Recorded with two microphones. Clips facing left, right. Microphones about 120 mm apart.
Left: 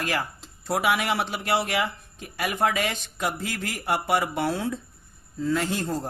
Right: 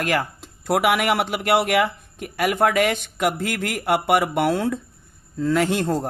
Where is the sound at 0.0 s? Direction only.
55° right (ahead or behind).